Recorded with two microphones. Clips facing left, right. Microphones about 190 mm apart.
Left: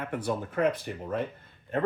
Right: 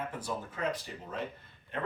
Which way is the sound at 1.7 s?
45° left (ahead or behind).